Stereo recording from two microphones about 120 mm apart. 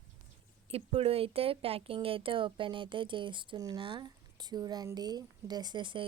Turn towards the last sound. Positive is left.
turn(degrees=-40)  # may be behind; listen again after turning